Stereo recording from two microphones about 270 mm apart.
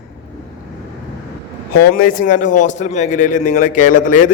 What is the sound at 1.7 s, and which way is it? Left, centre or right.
A man's voice, left.